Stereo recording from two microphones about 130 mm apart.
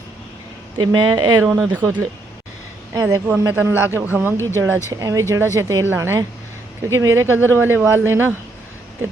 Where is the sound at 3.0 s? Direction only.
15° right (ahead or behind).